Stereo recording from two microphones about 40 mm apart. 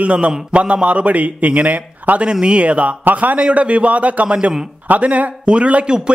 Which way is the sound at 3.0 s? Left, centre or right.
Right.